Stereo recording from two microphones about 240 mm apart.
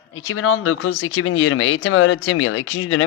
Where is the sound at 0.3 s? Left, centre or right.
Left.